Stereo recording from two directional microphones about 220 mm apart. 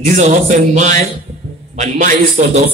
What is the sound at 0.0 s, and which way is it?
A man's voice, 35° right (ahead or behind).